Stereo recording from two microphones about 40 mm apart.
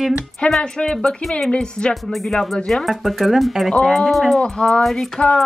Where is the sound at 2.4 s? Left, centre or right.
Centre.